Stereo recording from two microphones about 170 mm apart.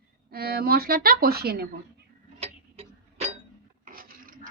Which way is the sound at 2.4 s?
40° right (ahead or behind).